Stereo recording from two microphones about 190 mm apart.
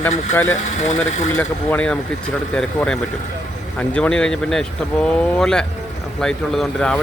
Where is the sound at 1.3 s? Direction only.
10° left (ahead or behind).